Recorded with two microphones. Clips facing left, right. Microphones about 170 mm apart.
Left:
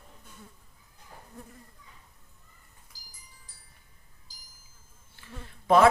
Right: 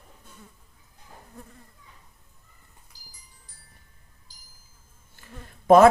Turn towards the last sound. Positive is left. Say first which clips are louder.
# right 6 dB
turn(degrees=-45)  # may be behind; listen again after turning